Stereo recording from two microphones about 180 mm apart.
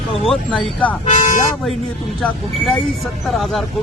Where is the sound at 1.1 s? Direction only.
40° left (ahead or behind).